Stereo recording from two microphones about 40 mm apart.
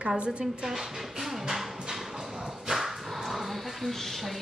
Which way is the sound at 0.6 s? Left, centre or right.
Centre.